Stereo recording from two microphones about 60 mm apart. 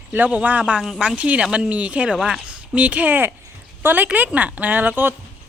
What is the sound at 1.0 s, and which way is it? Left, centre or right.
Speech, centre.